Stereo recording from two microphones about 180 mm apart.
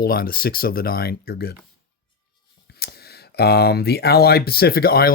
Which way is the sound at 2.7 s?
60° left (ahead or behind).